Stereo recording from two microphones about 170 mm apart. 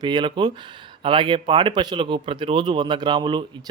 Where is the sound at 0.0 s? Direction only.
25° right (ahead or behind).